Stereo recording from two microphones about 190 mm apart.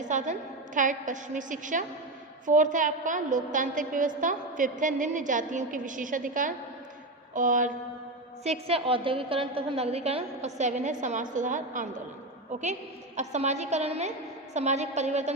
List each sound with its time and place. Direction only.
0.1 s a woman's voice: 40° right (ahead or behind)
8.4 s a woman's voice: 30° right (ahead or behind)
13.1 s a woman's voice: 35° right (ahead or behind)